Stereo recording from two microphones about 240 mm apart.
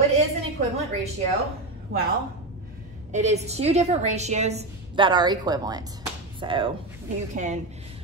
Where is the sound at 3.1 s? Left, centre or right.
Right.